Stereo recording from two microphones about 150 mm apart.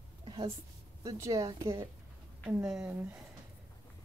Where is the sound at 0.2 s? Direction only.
35° right (ahead or behind).